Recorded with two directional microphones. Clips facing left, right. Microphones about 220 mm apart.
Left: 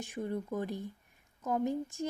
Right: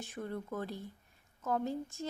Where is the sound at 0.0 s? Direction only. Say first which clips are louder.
Left 4 dB; 15° left (ahead or behind).